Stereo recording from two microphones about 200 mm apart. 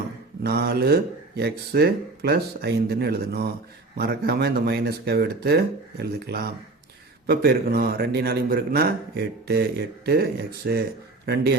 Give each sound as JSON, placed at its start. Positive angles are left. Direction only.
{"t": 0.4, "sound": "speech", "side_deg": -50}